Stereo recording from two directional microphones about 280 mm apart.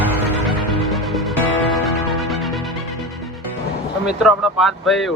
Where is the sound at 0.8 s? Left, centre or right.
Centre.